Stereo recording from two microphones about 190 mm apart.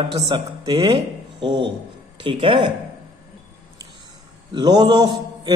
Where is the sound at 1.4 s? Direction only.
70° right (ahead or behind).